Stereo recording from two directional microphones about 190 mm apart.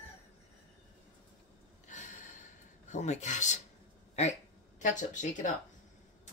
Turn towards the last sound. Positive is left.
turn(degrees=40)  # may be behind; listen again after turning